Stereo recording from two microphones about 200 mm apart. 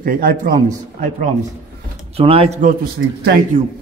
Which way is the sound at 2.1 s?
30° right (ahead or behind).